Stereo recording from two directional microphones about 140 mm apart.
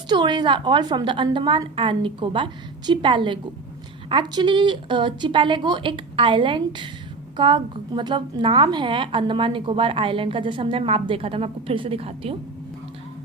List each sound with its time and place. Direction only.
0.1 s a woman's voice: 35° right (ahead or behind)